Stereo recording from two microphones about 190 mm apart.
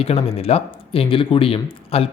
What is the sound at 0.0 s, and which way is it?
Speech, 30° left (ahead or behind).